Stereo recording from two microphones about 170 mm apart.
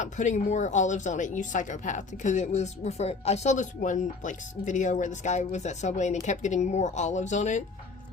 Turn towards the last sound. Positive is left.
turn(degrees=45)  # may be behind; listen again after turning